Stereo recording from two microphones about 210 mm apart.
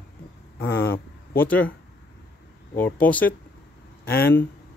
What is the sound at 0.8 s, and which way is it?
Speech, 10° left (ahead or behind).